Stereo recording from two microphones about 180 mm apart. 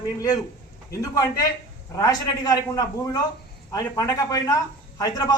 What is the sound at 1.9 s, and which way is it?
A man's voice, 20° left (ahead or behind).